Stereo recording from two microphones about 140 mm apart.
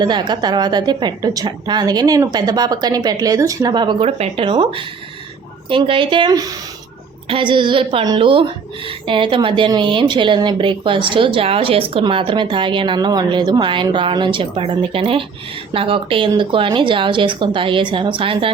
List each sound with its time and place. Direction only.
0.0 s a woman's voice: 30° right (ahead or behind)
4.0 s a woman's voice: 45° right (ahead or behind)